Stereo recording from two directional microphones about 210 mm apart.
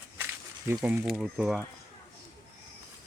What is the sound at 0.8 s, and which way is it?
Speech, 5° right (ahead or behind).